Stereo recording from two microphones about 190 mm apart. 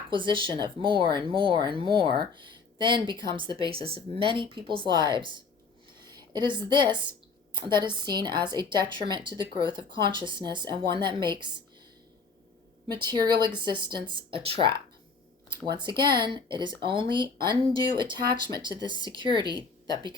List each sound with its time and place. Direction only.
0.1 s a woman's voice: 25° right (ahead or behind)
12.9 s speech: 20° right (ahead or behind)